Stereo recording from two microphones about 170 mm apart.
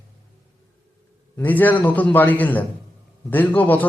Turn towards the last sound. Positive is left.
turn(degrees=10)  # may be behind; listen again after turning